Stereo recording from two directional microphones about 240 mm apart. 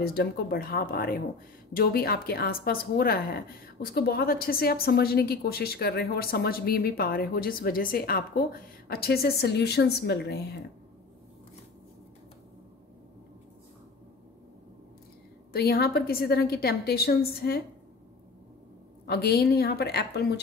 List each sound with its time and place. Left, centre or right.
0.0 s a woman's voice: left
15.5 s a woman's voice: left
19.0 s a woman's voice: left